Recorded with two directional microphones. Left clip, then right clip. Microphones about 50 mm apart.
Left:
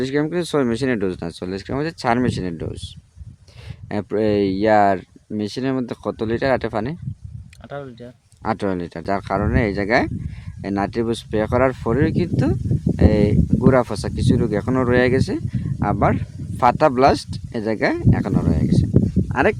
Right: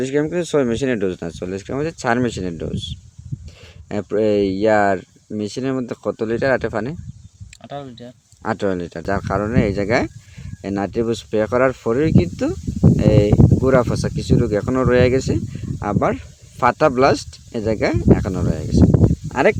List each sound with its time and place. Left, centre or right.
0.0 s speech: left
2.0 s speech: centre
3.8 s speech: left; by 15.4 s centre
15.8 s speech: left
19.3 s speech: centre